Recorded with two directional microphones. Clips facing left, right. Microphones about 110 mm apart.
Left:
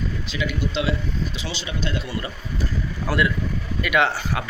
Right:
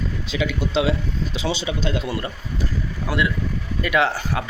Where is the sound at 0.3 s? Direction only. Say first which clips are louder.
Right 4 dB; 90° right.